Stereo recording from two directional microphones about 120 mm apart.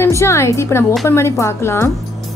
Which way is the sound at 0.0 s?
25° left (ahead or behind).